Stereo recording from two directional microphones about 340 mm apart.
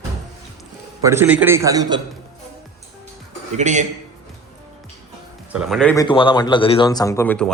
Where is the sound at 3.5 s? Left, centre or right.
Centre.